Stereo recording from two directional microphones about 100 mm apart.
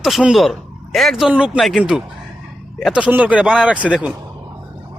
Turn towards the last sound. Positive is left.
turn(degrees=-10)  # may be behind; listen again after turning